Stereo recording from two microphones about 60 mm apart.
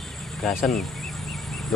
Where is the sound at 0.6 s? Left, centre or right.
Centre.